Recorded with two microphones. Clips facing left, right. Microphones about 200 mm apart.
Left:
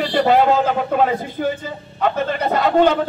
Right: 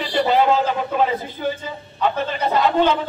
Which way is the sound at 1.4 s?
65° left (ahead or behind).